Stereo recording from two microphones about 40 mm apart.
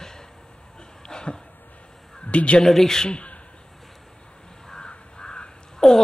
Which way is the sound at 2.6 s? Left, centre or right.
Centre.